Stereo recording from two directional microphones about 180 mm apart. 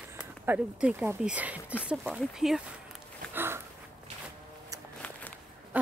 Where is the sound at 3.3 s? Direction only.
15° right (ahead or behind).